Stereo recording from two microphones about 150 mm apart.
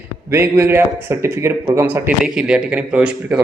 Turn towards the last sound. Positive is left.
turn(degrees=-5)  # may be behind; listen again after turning